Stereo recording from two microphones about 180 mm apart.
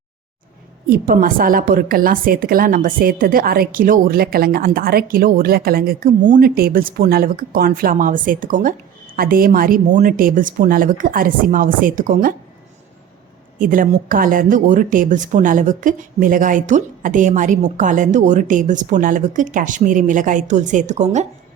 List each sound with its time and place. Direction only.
0.9 s a woman's voice: 55° right (ahead or behind)
13.6 s a woman's voice: 50° right (ahead or behind)